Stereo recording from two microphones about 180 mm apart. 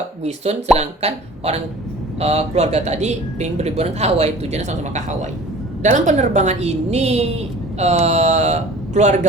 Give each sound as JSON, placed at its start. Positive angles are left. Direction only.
{"t": 0.2, "sound": "a man's voice", "side_deg": -35}